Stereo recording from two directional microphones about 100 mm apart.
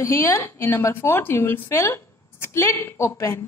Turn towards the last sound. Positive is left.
turn(degrees=25)  # may be behind; listen again after turning